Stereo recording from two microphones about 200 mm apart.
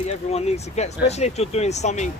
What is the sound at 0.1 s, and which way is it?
Speech, 30° left (ahead or behind).